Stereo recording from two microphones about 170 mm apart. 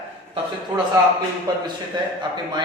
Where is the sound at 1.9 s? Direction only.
25° right (ahead or behind).